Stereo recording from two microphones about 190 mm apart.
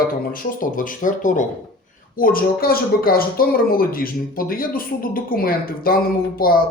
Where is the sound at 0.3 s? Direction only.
45° left (ahead or behind).